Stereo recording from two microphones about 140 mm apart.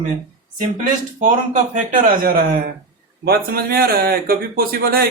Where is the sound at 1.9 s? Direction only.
85° right.